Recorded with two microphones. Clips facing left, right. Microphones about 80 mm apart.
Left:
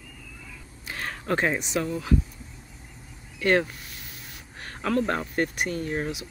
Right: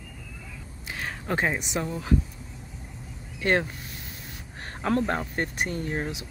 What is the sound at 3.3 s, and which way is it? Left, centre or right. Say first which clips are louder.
Speech: left 2 dB; right.